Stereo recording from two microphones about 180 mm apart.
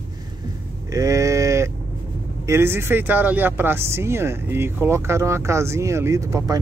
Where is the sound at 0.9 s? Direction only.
15° right (ahead or behind).